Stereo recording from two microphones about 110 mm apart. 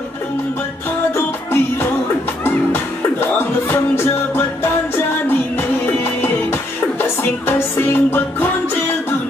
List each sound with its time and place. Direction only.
1.1 s music: 20° left (ahead or behind)
5.6 s music: 20° left (ahead or behind)